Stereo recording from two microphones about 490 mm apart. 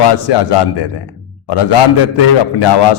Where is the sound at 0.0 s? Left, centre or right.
Left.